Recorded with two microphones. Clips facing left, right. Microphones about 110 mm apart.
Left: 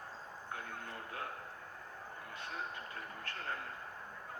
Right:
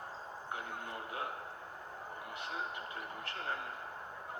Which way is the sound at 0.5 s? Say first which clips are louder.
Right 3 dB; 15° right (ahead or behind).